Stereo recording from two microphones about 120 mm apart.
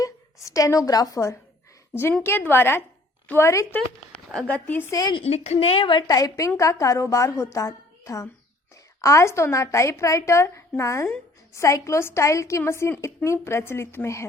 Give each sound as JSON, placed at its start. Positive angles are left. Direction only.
{"t": 0.0, "sound": "a woman's voice", "side_deg": 30}
{"t": 3.8, "sound": "speech", "side_deg": 5}
{"t": 4.9, "sound": "speech", "side_deg": 30}
{"t": 5.2, "sound": "a woman's voice", "side_deg": 65}